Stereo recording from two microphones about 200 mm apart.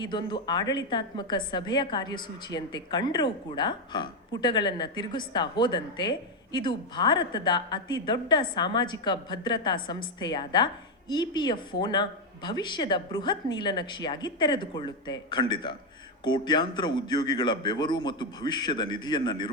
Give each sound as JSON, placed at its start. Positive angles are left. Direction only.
{"t": 0.0, "sound": "a woman's voice", "side_deg": 20}